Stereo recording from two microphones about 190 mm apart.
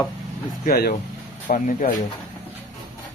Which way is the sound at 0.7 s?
55° left (ahead or behind).